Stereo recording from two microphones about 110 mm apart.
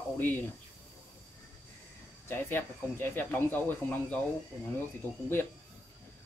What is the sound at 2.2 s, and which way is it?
Speech, 20° left (ahead or behind).